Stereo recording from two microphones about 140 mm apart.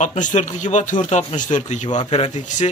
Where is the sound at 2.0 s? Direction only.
40° left (ahead or behind).